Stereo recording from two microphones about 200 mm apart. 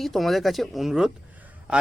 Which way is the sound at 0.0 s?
Centre (ahead or behind).